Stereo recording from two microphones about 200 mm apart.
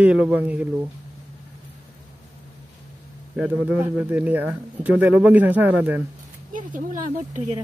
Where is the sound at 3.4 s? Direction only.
5° right (ahead or behind).